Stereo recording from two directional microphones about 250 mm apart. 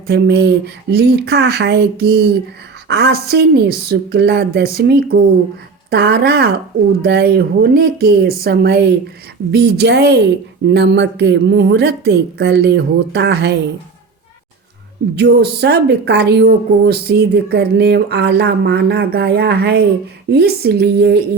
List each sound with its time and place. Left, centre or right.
0.1 s speech: right
15.1 s speech: right